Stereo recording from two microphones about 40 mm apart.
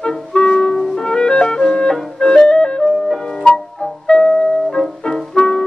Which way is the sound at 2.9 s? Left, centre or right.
Centre.